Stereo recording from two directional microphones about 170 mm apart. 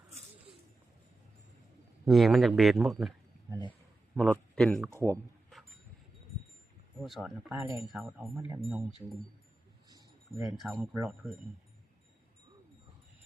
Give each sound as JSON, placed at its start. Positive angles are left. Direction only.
{"t": 2.0, "sound": "speech", "side_deg": 0}
{"t": 4.9, "sound": "speech", "side_deg": 15}
{"t": 7.0, "sound": "speech", "side_deg": 0}
{"t": 7.5, "sound": "speech", "side_deg": -15}
{"t": 7.9, "sound": "speech", "side_deg": 0}
{"t": 10.4, "sound": "speech", "side_deg": -5}